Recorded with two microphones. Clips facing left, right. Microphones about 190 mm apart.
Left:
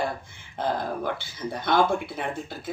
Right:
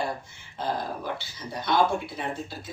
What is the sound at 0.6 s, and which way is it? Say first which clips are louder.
Speech: left 3 dB; 55° left (ahead or behind).